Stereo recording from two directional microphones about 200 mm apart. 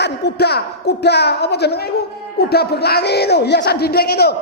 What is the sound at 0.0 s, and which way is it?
A woman's voice, 55° left (ahead or behind).